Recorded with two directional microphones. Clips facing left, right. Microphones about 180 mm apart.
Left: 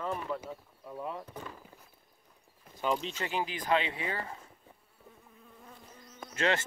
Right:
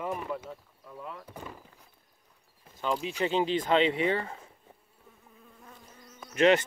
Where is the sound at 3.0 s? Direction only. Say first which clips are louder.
Right 7 dB; 15° right (ahead or behind).